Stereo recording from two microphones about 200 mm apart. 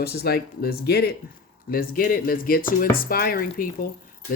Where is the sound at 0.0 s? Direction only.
50° left (ahead or behind).